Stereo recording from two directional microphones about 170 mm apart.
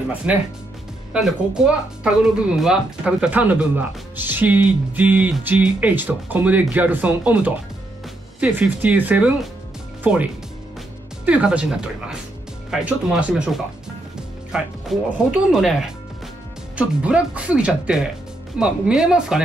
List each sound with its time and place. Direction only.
0.2 s speech: 10° right (ahead or behind)